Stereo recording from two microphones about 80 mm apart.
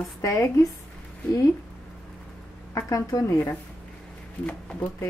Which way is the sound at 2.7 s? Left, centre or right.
Left.